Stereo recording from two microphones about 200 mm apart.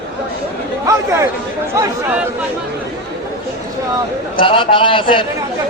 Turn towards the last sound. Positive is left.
turn(degrees=25)  # may be behind; listen again after turning